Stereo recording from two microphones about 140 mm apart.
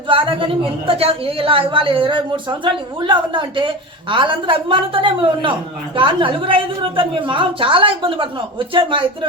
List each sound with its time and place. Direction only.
0.1 s a woman's voice: 40° right (ahead or behind)